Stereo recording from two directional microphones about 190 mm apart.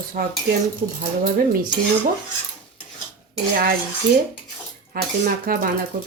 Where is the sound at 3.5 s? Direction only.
50° right (ahead or behind).